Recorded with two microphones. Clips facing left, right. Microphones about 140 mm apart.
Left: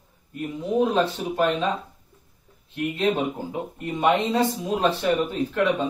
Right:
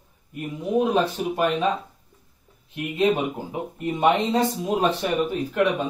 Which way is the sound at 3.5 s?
15° right (ahead or behind).